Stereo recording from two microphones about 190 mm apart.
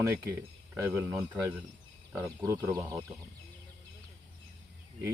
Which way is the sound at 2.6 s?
15° right (ahead or behind).